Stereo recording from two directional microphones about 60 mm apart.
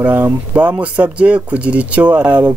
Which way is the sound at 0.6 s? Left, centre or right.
Right.